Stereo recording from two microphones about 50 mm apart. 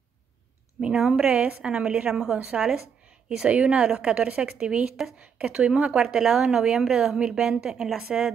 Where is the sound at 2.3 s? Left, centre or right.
Right.